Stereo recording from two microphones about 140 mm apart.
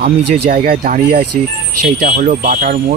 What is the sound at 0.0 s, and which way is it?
Speech, 90° right.